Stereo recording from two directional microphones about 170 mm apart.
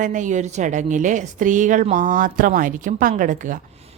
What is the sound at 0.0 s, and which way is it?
Speech, 45° right (ahead or behind).